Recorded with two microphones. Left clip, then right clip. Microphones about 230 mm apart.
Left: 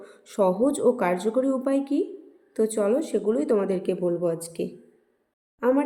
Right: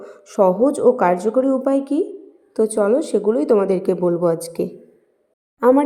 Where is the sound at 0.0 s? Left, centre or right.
Centre.